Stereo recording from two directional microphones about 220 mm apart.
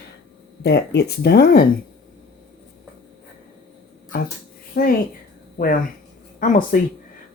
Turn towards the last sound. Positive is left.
turn(degrees=35)  # may be behind; listen again after turning